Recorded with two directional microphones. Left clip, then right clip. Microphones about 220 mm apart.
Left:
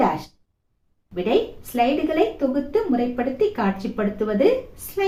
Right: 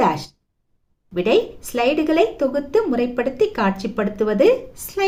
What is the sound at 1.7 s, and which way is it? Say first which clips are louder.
A woman's voice: right 3 dB; 50° right (ahead or behind).